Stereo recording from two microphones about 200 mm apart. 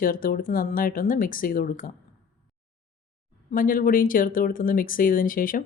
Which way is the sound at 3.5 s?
45° left (ahead or behind).